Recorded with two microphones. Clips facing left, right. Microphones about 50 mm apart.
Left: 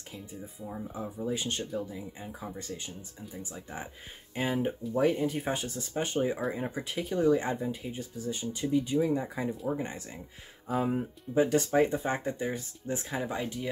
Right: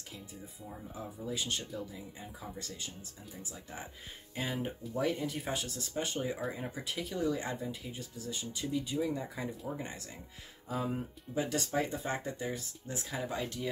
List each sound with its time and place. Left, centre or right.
1.2 s speech: left
4.4 s speech: left